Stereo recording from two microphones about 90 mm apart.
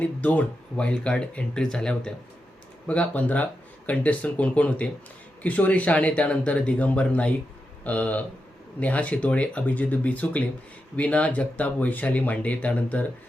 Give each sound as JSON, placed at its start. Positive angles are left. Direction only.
{"t": 0.0, "sound": "speech", "side_deg": 15}